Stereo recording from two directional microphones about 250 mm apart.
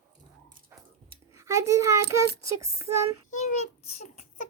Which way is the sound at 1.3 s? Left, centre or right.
Centre.